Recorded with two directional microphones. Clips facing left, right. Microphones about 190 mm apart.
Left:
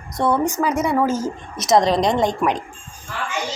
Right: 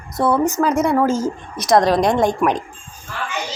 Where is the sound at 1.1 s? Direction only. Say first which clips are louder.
Right 3 dB; 10° right (ahead or behind).